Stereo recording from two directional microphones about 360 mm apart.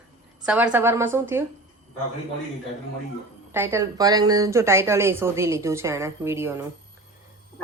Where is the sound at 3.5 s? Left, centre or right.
Centre.